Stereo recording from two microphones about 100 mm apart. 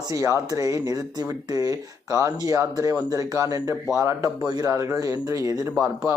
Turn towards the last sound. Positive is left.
turn(degrees=-25)  # may be behind; listen again after turning